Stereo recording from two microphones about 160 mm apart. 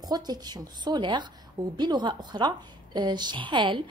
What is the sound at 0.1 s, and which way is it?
A woman's voice, 25° right (ahead or behind).